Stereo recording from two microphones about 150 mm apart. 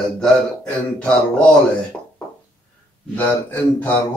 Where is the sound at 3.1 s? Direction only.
15° left (ahead or behind).